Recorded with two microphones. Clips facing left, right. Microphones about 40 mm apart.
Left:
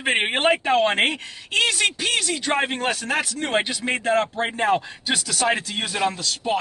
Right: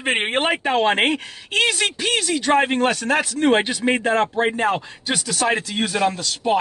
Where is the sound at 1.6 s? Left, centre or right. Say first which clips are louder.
Even; centre.